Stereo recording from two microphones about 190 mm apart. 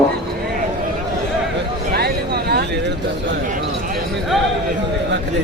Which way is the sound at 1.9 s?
55° right (ahead or behind).